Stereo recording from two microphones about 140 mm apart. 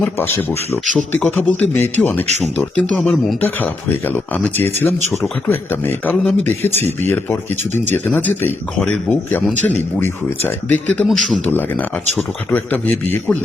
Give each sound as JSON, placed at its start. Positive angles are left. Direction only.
{"t": 0.0, "sound": "speech", "side_deg": 15}
{"t": 3.4, "sound": "speech", "side_deg": 15}